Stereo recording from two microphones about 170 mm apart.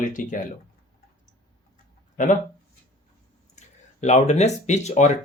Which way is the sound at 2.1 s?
50° left (ahead or behind).